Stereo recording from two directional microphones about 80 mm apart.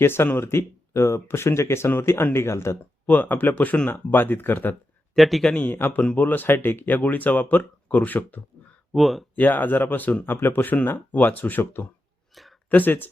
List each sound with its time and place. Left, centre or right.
0.0 s speech: left
3.1 s speech: left
5.1 s a man's voice: centre
5.5 s speech: left
8.9 s a man's voice: centre
9.3 s speech: left
12.3 s a sound: centre
12.7 s speech: left